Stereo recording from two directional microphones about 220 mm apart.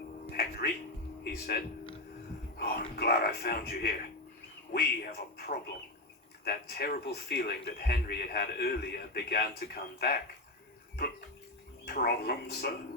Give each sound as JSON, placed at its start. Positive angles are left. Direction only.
{"t": 0.3, "sound": "music", "side_deg": 45}
{"t": 1.2, "sound": "speech", "side_deg": 45}
{"t": 11.9, "sound": "speech", "side_deg": 45}